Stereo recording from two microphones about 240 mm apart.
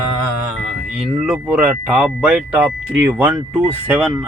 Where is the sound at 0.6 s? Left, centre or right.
Centre.